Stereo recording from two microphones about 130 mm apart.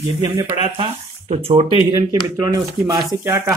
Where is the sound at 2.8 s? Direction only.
25° right (ahead or behind).